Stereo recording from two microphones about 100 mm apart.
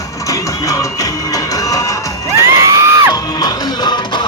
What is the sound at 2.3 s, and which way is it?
Crowd, 30° right (ahead or behind).